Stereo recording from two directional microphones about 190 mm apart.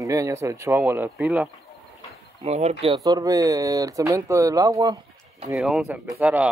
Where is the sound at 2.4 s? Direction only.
35° right (ahead or behind).